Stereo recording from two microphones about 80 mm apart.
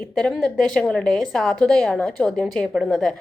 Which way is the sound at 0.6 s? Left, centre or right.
Centre.